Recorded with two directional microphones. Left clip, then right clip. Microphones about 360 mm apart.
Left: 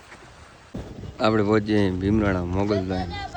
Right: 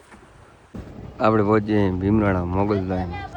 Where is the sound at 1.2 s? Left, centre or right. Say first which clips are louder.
Right 2 dB; centre.